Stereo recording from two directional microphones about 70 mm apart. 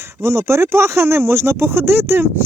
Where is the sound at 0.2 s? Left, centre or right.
Right.